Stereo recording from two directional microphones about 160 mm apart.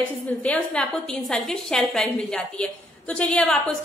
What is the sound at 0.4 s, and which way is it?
A woman's voice, 10° left (ahead or behind).